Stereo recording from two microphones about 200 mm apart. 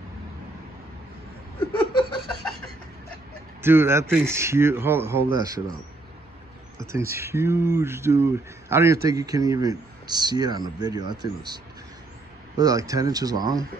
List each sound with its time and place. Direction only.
3.6 s speech: 10° right (ahead or behind)
6.9 s speech: 15° right (ahead or behind)